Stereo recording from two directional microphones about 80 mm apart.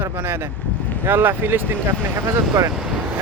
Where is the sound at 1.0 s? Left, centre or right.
Right.